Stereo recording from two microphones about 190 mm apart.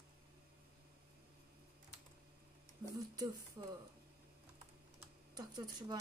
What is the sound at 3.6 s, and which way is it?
Speech, 20° right (ahead or behind).